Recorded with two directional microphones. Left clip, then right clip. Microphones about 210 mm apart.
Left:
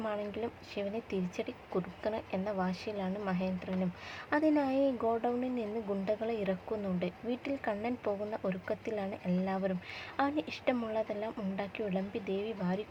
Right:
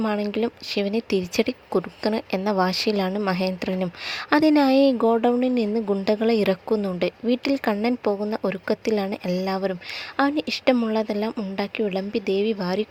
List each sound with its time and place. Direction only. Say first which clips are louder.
0.0 s speech: right 12 dB; 55° right (ahead or behind)
4.3 s speech: right 12 dB; 45° right (ahead or behind)